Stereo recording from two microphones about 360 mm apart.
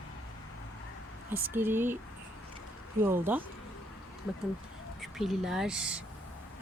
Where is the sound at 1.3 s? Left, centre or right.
Centre.